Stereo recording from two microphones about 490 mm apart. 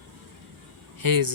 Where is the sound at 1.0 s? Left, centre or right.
Right.